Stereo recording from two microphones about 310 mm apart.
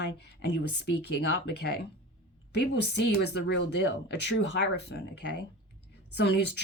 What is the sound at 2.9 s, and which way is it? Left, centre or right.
Speech, left.